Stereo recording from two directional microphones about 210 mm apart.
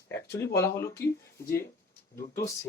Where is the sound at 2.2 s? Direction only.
15° left (ahead or behind).